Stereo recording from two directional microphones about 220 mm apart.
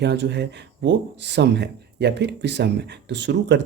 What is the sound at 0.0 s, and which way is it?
Speech, 50° right (ahead or behind).